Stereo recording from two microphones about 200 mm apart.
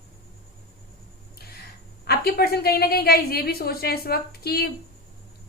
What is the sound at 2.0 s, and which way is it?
A woman's voice, 50° left (ahead or behind).